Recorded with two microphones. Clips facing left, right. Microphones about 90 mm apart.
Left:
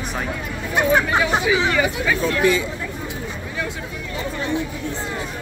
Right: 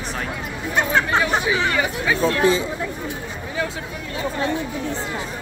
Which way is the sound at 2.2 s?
30° right (ahead or behind).